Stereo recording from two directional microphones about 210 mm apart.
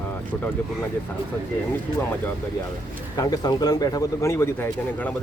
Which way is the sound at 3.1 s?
20° left (ahead or behind).